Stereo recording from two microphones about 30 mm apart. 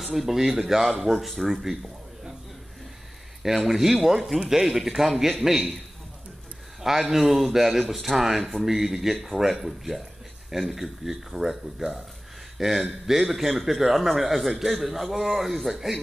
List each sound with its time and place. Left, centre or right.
0.0 s speech: centre
3.4 s a man's voice: centre
5.4 s a man's voice: right
6.8 s speech: centre
12.5 s a man's voice: centre